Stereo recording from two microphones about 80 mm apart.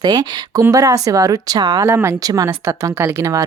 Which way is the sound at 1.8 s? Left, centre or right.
Right.